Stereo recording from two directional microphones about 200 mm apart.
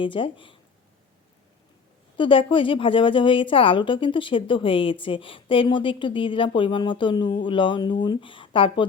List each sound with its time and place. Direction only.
0.0 s a woman's voice: 25° left (ahead or behind)
2.1 s a woman's voice: 25° left (ahead or behind)